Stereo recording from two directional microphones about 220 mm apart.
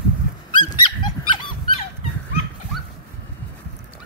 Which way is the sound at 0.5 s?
20° left (ahead or behind).